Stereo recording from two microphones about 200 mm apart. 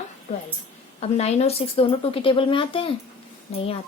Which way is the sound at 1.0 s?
30° left (ahead or behind).